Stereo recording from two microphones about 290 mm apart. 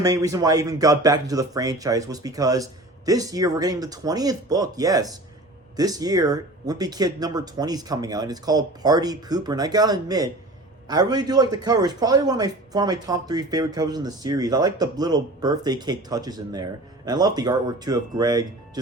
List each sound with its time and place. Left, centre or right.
0.0 s a man's voice: centre